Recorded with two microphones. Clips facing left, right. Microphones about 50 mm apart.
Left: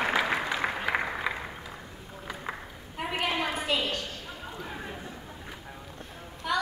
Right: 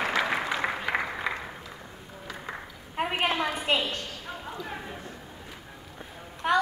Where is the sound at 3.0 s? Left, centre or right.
Right.